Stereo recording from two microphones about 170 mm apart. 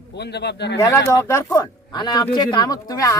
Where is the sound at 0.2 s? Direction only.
80° left.